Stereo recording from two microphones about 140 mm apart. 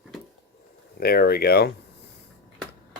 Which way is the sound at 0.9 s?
90° left.